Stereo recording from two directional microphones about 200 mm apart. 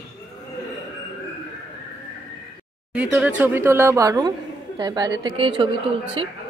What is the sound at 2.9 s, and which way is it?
Speech, 5° right (ahead or behind).